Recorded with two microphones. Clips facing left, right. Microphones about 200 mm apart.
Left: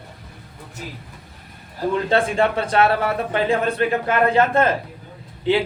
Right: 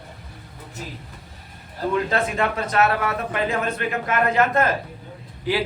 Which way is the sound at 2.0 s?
30° left (ahead or behind).